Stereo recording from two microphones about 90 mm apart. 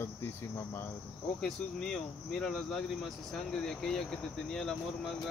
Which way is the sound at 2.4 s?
5° left (ahead or behind).